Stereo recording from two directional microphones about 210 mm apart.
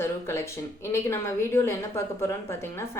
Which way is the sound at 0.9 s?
15° left (ahead or behind).